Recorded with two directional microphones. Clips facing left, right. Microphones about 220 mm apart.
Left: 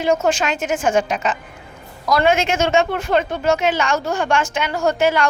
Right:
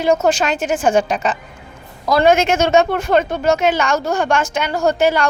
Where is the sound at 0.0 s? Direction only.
40° right (ahead or behind).